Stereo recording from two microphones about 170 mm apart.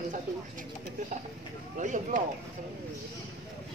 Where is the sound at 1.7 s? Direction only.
45° right (ahead or behind).